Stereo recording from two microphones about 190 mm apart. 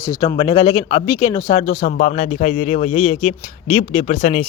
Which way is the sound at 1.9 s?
40° left (ahead or behind).